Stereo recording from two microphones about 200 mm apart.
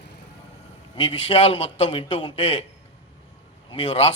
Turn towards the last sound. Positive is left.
turn(degrees=30)  # may be behind; listen again after turning